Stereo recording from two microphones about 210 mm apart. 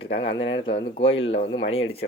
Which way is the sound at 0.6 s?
25° left (ahead or behind).